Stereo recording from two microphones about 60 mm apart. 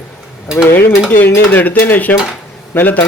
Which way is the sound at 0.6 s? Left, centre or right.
Left.